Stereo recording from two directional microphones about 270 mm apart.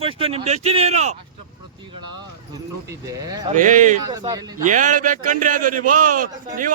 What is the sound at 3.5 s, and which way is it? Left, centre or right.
Speech, right.